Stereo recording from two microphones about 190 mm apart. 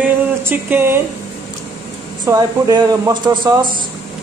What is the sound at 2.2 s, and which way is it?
Speech, 20° right (ahead or behind).